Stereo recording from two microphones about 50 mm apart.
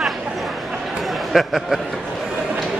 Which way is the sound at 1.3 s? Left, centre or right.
Centre.